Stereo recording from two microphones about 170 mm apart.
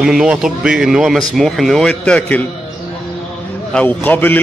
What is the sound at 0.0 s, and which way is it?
A man's voice, 5° right (ahead or behind).